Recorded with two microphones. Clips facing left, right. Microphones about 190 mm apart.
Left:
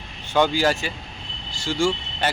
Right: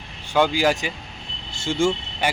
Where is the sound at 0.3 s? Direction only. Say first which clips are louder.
Even; 10° right (ahead or behind).